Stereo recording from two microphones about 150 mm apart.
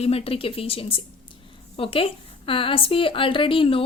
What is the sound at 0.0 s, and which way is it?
Speech, 40° left (ahead or behind).